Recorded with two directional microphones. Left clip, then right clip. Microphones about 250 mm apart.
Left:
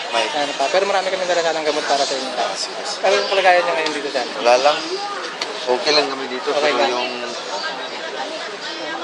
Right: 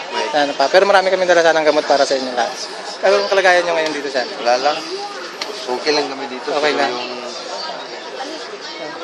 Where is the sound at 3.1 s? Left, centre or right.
Right.